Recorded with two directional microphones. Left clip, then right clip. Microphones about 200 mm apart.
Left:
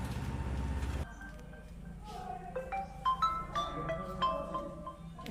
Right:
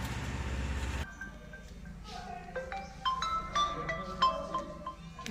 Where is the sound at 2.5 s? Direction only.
15° left (ahead or behind).